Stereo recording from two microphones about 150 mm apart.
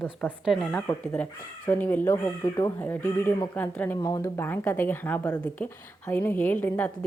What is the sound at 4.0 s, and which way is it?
Speech, 25° left (ahead or behind).